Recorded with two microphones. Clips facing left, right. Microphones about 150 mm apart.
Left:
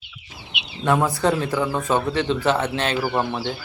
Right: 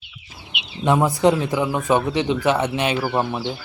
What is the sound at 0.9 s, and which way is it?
Speech, 20° right (ahead or behind).